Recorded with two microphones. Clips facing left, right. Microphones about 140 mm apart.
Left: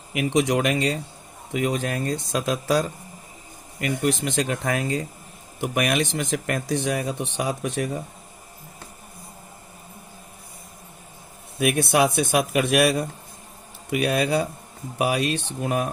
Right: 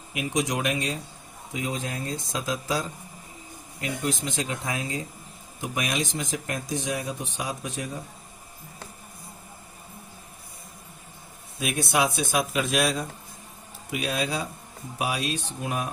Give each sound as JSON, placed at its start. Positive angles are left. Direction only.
{"t": 0.1, "sound": "speech", "side_deg": 60}
{"t": 11.6, "sound": "speech", "side_deg": 60}